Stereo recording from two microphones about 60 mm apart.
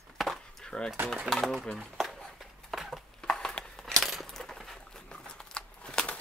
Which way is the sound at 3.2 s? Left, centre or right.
Centre.